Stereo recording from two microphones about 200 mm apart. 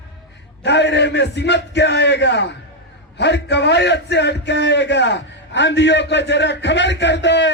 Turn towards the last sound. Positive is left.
turn(degrees=60)  # may be behind; listen again after turning